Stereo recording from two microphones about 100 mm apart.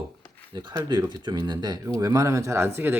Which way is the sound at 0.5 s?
50° right (ahead or behind).